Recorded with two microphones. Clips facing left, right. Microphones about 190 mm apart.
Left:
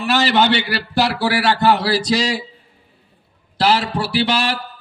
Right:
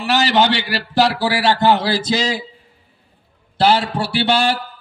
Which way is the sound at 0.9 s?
15° right (ahead or behind).